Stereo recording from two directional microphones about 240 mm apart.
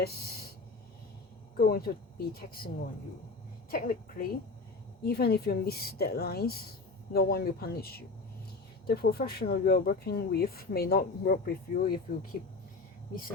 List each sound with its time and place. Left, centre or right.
0.0 s a sound: left
1.5 s speech: left
3.7 s speech: left